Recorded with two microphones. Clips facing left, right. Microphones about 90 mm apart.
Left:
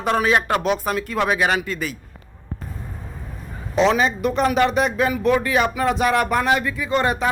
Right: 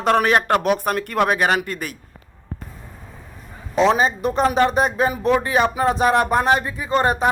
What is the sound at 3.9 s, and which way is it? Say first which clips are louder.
Speech: right 1 dB; 35° right (ahead or behind).